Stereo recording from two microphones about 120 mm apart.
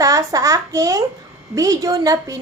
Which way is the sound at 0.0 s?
25° right (ahead or behind).